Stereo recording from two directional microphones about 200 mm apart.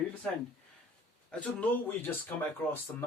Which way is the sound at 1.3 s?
5° left (ahead or behind).